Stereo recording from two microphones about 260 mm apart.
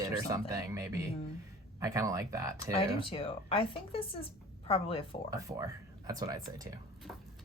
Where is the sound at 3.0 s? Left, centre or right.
Left.